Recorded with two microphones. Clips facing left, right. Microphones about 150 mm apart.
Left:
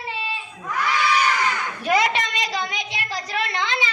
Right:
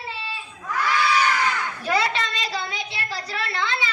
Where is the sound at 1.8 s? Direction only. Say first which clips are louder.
Left 3 dB; 15° left (ahead or behind).